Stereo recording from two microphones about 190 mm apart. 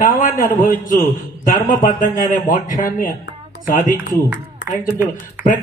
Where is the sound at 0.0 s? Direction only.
40° left (ahead or behind).